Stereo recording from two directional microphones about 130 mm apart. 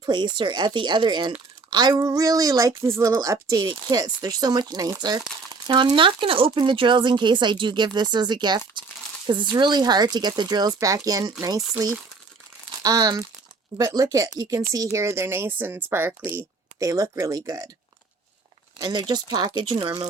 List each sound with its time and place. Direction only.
0.0 s speech: 35° right (ahead or behind)
12.8 s speech: 30° right (ahead or behind)
18.8 s speech: 35° right (ahead or behind)